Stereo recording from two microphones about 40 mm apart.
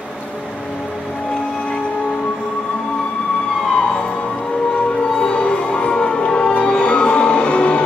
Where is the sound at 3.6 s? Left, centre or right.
Left.